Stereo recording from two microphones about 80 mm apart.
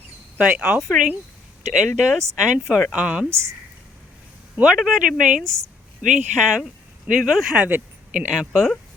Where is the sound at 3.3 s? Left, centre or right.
Right.